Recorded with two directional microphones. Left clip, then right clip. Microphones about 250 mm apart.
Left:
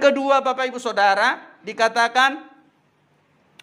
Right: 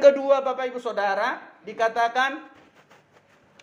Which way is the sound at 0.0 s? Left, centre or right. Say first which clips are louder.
Even; left.